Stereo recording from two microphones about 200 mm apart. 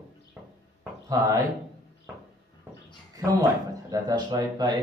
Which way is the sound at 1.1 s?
20° right (ahead or behind).